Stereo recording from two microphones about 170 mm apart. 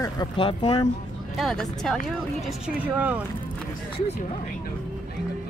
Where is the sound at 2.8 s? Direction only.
10° right (ahead or behind).